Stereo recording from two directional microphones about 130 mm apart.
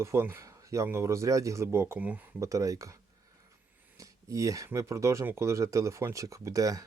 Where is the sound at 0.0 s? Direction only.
20° right (ahead or behind).